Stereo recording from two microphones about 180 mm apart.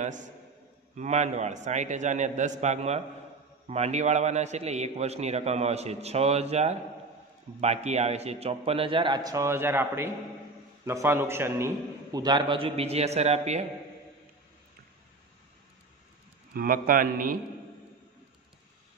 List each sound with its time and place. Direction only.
0.9 s a man's voice: 40° right (ahead or behind)
16.5 s a man's voice: 50° right (ahead or behind)